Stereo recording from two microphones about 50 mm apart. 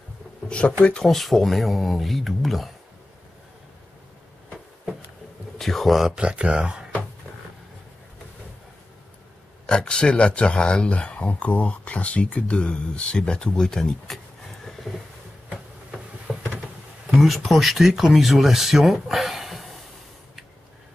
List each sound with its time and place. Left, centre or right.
0.5 s speech: left
1.0 s speech: centre
5.6 s speech: centre
6.1 s speech: centre
9.7 s speech: centre
14.9 s speech: centre
16.3 s a sound: centre
17.5 s speech: centre